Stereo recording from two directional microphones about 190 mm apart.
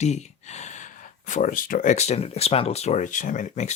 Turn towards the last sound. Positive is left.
turn(degrees=40)  # may be behind; listen again after turning